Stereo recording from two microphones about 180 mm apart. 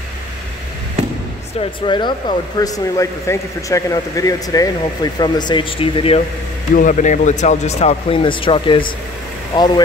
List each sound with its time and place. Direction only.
1.6 s speech: 25° left (ahead or behind)
6.7 s speech: 50° left (ahead or behind); by 8.8 s 30° left (ahead or behind)